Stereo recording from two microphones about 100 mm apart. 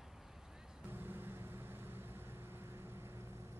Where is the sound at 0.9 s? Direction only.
20° right (ahead or behind).